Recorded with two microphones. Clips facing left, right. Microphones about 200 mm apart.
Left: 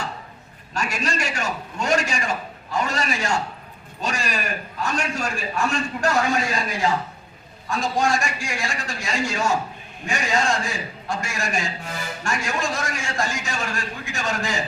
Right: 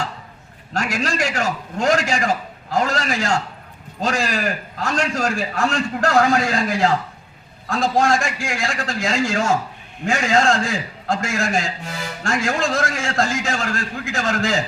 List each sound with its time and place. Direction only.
0.7 s a man's voice: 90° right